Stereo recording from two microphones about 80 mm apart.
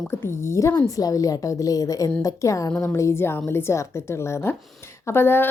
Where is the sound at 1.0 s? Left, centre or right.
Left.